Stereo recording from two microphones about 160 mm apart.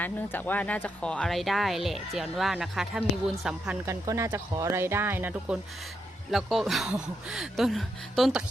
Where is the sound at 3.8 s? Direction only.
20° right (ahead or behind).